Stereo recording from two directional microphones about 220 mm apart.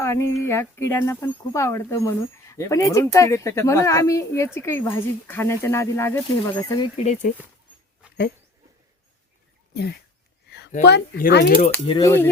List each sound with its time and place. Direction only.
0.0 s speech: 10° left (ahead or behind)
6.9 s speech: 30° left (ahead or behind)
9.7 s speech: 45° left (ahead or behind)
11.9 s speech: 15° left (ahead or behind)